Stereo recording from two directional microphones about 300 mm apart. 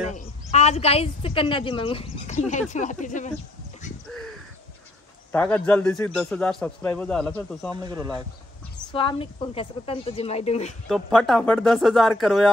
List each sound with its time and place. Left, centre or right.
0.1 s a woman's voice: left
5.3 s a man's voice: centre
7.7 s speech: centre
8.9 s a woman's voice: centre
10.9 s a man's voice: centre